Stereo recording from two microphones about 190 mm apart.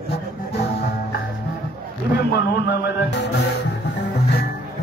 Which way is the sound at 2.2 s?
60° left (ahead or behind).